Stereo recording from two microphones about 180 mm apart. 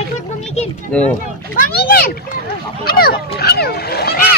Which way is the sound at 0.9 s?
5° left (ahead or behind).